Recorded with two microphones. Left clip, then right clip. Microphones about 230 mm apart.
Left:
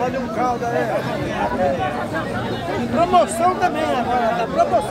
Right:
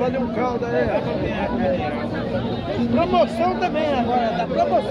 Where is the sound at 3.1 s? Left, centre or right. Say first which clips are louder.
Left 4 dB; centre.